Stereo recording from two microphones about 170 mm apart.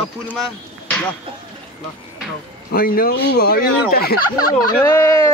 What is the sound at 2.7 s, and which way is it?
Speech, 60° left (ahead or behind).